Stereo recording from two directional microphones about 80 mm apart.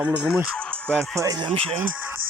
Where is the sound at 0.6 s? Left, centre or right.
Centre.